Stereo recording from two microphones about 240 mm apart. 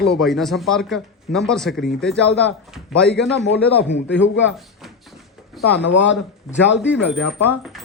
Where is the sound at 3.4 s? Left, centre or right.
Left.